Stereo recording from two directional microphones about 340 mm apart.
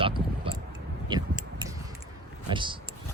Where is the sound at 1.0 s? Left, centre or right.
Centre.